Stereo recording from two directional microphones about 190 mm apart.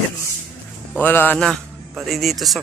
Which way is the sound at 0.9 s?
10° left (ahead or behind).